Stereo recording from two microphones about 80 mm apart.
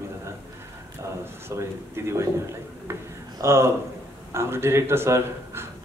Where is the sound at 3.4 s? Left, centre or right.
Right.